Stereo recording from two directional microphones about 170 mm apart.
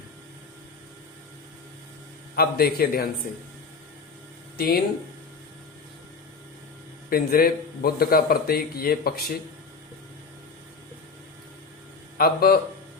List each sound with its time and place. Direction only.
2.3 s a man's voice: 65° left (ahead or behind)
4.5 s speech: 65° left (ahead or behind)
7.1 s a man's voice: 60° left (ahead or behind)
12.1 s a man's voice: 60° left (ahead or behind)